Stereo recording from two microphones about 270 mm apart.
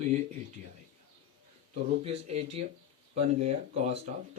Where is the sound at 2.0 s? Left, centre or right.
Right.